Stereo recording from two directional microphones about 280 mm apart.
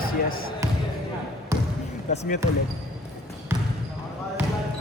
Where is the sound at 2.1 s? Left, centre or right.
Left.